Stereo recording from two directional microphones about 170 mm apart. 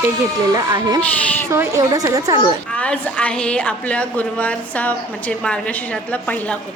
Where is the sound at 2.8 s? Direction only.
10° left (ahead or behind).